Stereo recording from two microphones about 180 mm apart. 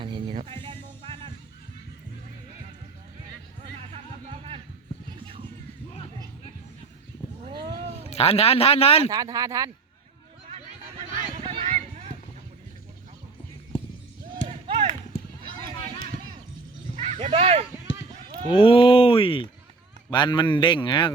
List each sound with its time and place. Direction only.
0.0 s music: 25° right (ahead or behind)
3.9 s music: 35° right (ahead or behind)
5.2 s a sound: 30° right (ahead or behind)
7.4 s a sound: 25° right (ahead or behind)
8.1 s speech: 35° left (ahead or behind)
9.0 s speech: 20° right (ahead or behind)
11.4 s a sound: 30° right (ahead or behind)
14.4 s basketball bounce: 35° right (ahead or behind)
16.9 s bow-wow: 35° right (ahead or behind)
18.4 s a man's voice: 30° left (ahead or behind)